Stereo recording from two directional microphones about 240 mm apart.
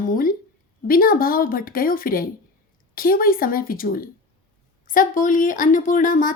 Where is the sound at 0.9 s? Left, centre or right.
Left.